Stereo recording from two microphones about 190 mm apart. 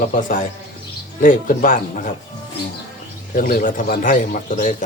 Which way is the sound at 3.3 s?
45° left (ahead or behind).